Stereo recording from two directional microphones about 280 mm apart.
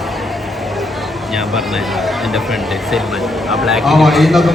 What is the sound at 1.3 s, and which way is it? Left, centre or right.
Speech, centre.